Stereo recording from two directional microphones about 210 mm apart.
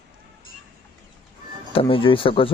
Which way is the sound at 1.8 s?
25° left (ahead or behind).